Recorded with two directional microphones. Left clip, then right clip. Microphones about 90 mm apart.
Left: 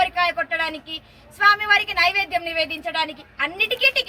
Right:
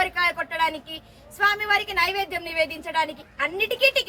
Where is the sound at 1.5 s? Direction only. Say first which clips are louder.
Left 6 dB; 55° right (ahead or behind).